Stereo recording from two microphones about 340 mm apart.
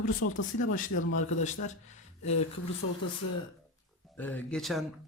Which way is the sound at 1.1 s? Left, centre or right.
Left.